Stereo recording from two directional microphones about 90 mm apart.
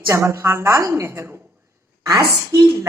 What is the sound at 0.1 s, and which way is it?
A woman's voice, 30° right (ahead or behind).